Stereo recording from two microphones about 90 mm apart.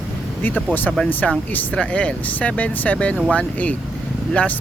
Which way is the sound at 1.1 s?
20° left (ahead or behind).